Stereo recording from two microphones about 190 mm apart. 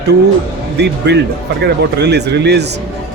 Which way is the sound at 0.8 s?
60° right (ahead or behind).